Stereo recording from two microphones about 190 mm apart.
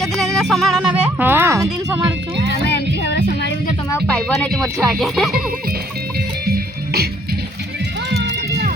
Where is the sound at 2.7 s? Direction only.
65° left (ahead or behind).